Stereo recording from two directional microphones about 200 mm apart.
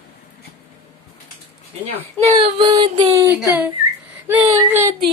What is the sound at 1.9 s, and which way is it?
Speech, 30° right (ahead or behind).